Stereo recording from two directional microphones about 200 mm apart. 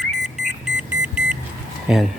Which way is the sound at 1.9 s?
Centre (ahead or behind).